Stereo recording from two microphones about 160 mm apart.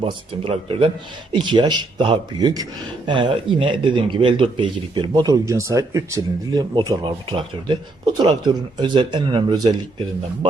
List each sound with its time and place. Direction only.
0.0 s speech: 35° right (ahead or behind)